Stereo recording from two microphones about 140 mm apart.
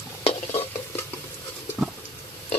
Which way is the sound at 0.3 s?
50° left (ahead or behind).